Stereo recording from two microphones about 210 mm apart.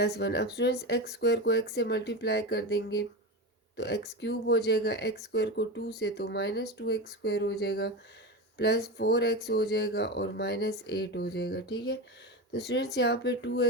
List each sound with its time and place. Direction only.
0.0 s speech: 50° left (ahead or behind)